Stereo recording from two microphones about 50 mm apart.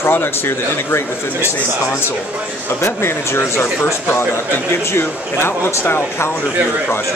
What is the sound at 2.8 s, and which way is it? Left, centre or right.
Speech, left.